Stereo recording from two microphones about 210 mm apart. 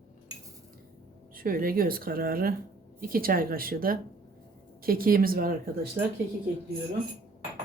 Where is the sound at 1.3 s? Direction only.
45° right (ahead or behind).